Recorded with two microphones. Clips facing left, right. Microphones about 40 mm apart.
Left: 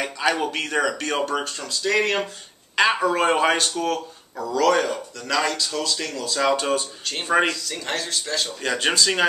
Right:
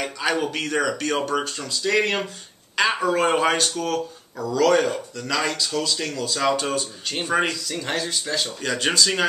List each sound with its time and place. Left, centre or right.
0.0 s speech: centre